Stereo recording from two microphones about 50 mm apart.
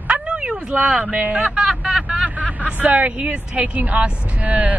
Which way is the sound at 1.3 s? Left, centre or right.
Centre.